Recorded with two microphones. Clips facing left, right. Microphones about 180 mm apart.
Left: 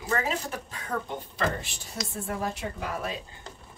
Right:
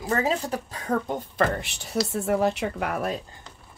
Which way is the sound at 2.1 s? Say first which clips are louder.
Right 8 dB; 80° right.